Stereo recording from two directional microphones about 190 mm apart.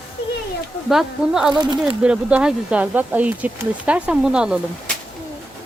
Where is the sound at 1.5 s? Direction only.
25° right (ahead or behind).